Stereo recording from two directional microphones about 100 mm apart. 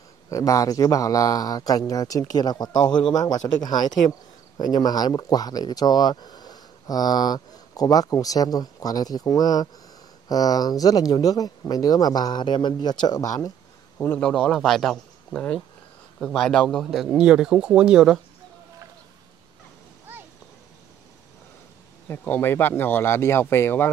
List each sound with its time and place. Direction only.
0.3 s speech: 35° left (ahead or behind)
13.9 s a man's voice: 20° left (ahead or behind)
14.3 s speech: centre (ahead or behind)
22.0 s speech: 20° left (ahead or behind)